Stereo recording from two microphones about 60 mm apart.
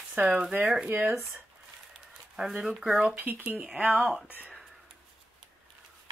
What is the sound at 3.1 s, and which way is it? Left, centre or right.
Speech, right.